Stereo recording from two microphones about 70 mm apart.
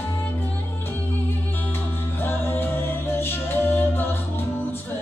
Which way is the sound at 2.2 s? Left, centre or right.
Left.